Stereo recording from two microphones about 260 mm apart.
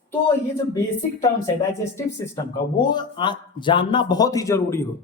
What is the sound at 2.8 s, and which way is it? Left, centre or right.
A man's voice, centre.